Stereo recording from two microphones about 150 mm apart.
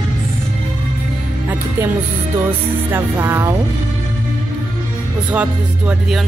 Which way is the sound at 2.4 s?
15° right (ahead or behind).